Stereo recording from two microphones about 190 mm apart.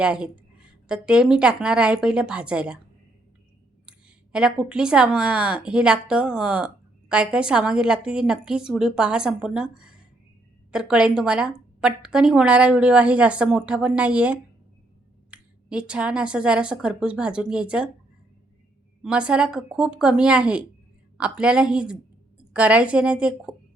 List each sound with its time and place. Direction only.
0.0 s a woman's voice: 5° right (ahead or behind)
3.8 s a woman's voice: 5° right (ahead or behind)
19.0 s a woman's voice: 5° right (ahead or behind)